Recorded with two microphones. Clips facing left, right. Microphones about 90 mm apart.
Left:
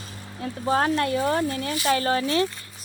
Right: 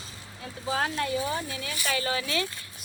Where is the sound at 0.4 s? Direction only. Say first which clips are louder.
Left 7 dB; 50° left (ahead or behind).